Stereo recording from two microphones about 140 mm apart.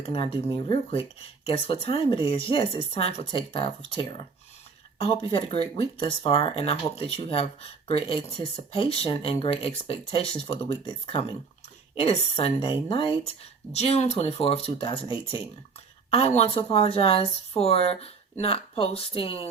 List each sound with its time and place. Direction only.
0.0 s speech: 40° left (ahead or behind)